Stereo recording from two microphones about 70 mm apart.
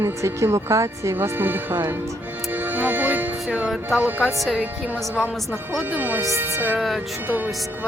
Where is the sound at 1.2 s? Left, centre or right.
Right.